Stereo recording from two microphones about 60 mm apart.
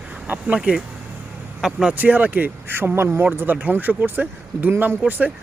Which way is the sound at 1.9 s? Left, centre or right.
Right.